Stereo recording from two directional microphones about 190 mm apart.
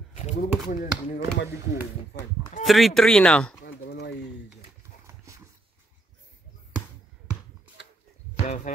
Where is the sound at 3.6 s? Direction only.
60° left (ahead or behind).